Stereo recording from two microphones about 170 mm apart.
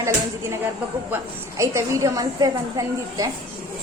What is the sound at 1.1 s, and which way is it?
A woman's voice, 15° right (ahead or behind).